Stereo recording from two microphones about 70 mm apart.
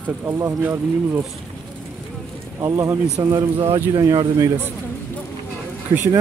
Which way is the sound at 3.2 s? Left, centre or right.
Right.